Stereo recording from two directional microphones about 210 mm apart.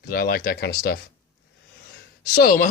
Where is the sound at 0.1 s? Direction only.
45° left (ahead or behind).